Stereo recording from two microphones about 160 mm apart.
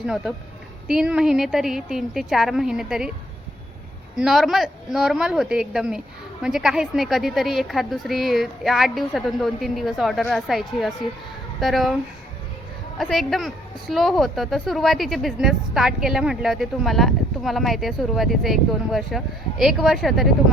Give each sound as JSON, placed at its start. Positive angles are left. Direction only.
{"t": 0.0, "sound": "a woman's voice", "side_deg": -5}
{"t": 4.2, "sound": "a woman's voice", "side_deg": 0}
{"t": 13.0, "sound": "a woman's voice", "side_deg": 0}